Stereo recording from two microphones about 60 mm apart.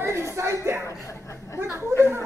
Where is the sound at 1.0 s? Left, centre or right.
Left.